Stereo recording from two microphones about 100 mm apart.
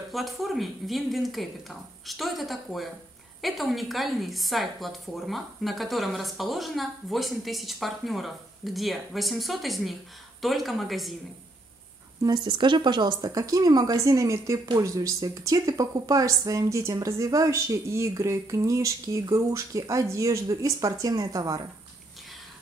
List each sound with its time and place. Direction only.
0.1 s a woman's voice: centre (ahead or behind)
12.4 s a woman's voice: 55° right (ahead or behind); by 21.5 s 35° right (ahead or behind)